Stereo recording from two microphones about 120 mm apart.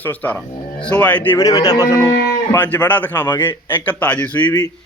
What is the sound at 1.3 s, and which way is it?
Speech, 30° left (ahead or behind).